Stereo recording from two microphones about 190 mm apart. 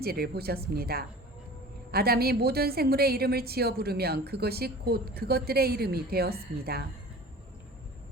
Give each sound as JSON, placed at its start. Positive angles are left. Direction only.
{"t": 0.0, "sound": "a woman's voice", "side_deg": -55}